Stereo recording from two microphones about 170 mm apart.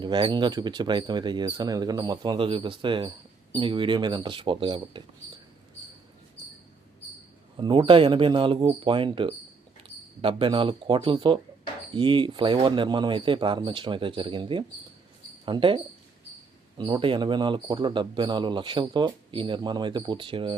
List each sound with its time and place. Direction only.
0.0 s speech: 25° right (ahead or behind)
7.5 s speech: 30° right (ahead or behind)